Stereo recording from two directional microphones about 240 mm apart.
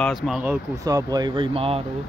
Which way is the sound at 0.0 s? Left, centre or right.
Centre.